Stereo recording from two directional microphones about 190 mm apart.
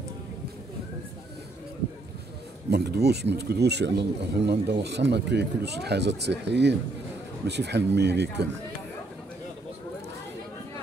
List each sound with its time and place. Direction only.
2.7 s speech: 60° right (ahead or behind)